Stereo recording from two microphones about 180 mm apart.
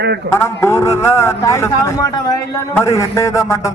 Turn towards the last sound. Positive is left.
turn(degrees=15)  # may be behind; listen again after turning